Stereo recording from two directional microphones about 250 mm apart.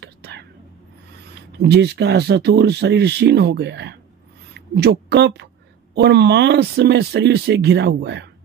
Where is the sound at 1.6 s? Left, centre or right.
Right.